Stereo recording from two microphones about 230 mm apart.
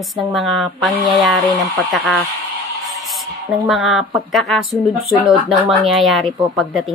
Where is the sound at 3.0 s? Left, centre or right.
Centre.